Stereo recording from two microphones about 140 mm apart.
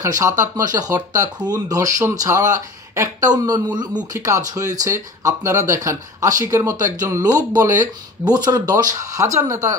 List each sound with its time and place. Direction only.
0.0 s speech: 25° right (ahead or behind)